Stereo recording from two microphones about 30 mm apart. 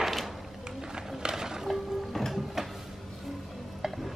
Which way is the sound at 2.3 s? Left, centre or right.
Centre.